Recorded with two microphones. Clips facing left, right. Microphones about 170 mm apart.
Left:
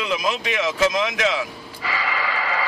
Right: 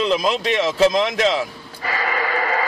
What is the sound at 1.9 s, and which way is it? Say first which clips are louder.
Snort: right 4 dB; 50° right (ahead or behind).